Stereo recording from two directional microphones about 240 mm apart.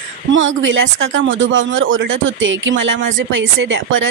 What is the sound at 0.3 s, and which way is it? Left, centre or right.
A woman's voice, right.